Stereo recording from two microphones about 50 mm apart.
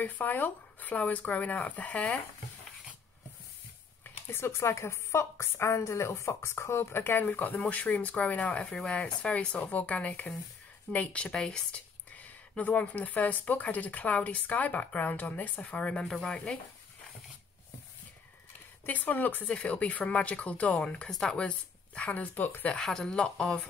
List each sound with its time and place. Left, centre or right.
0.0 s speech: left
4.0 s a woman's voice: left
8.7 s speech: centre
11.3 s speech: centre
11.7 s speech: left
15.9 s speech: centre
18.9 s speech: left
19.4 s speech: left
21.1 s speech: centre
21.5 s speech: left
22.8 s speech: centre